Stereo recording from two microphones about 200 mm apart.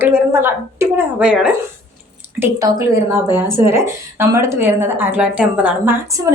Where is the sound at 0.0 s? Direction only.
10° right (ahead or behind).